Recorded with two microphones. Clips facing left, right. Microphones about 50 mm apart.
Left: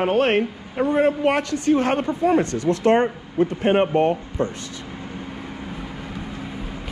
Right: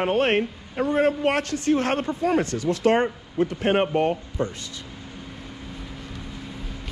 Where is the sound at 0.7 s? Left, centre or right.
Left.